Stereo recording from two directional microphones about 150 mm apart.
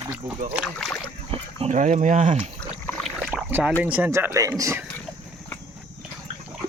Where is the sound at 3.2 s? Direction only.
10° right (ahead or behind).